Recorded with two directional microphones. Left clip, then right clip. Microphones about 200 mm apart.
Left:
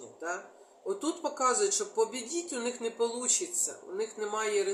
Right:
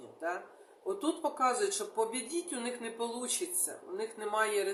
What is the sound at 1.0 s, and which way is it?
Speech, 15° right (ahead or behind).